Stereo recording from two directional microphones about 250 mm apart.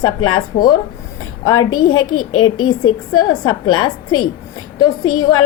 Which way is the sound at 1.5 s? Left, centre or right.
Left.